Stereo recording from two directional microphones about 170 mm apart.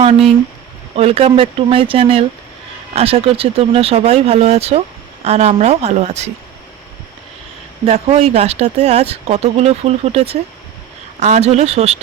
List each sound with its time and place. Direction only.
0.9 s speech: 35° right (ahead or behind)
7.9 s speech: 40° right (ahead or behind)